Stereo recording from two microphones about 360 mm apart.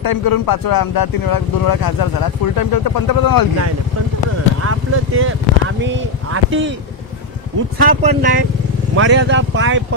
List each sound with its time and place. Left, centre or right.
0.0 s speech: left
4.6 s speech: right
7.8 s speech: right